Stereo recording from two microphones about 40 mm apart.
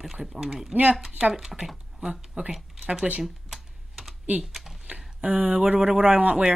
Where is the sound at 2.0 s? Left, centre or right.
Right.